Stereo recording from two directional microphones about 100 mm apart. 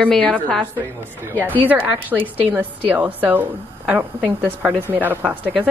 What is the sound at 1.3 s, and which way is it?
Speech, 15° left (ahead or behind).